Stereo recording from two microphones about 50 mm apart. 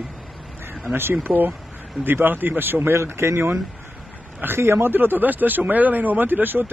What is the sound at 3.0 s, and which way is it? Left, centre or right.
Speech, right.